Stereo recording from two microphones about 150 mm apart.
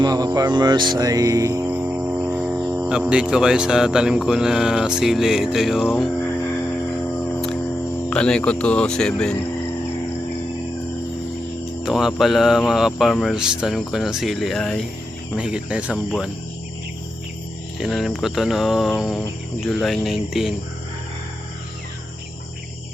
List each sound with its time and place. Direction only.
0.0 s music: 25° right (ahead or behind); by 2.7 s 5° right (ahead or behind)
2.8 s speech: 5° right (ahead or behind)
8.1 s speech: 5° left (ahead or behind)
11.6 s speech: centre (ahead or behind)
17.7 s speech: centre (ahead or behind)